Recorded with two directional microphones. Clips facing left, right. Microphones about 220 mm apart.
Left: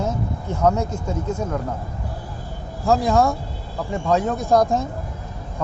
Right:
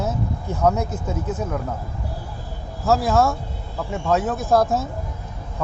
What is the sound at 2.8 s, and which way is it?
Speech, 5° right (ahead or behind).